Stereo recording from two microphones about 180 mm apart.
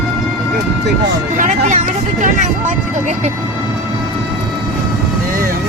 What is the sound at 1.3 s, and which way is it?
Speech, 45° right (ahead or behind).